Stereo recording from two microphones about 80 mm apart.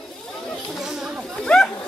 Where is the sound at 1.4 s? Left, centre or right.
Centre.